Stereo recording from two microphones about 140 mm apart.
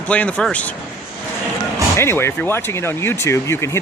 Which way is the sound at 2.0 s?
20° left (ahead or behind).